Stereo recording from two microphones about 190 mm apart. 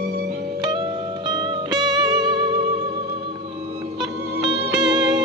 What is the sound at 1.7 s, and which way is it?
Music, 20° right (ahead or behind).